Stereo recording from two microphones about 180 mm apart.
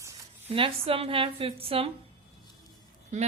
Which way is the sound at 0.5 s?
30° right (ahead or behind).